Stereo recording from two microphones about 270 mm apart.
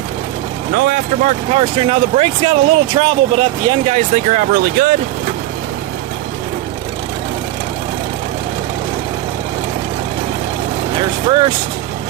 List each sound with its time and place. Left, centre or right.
0.7 s speech: right
10.9 s speech: centre